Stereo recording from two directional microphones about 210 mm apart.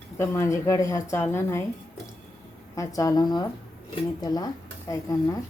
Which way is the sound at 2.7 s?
15° left (ahead or behind).